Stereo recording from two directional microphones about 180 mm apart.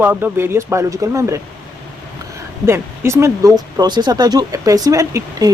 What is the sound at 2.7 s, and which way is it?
Speech, 15° right (ahead or behind).